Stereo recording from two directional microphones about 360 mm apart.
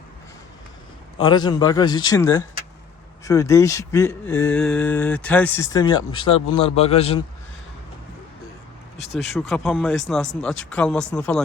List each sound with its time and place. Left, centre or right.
1.2 s speech: centre
9.0 s speech: left
9.3 s speech: centre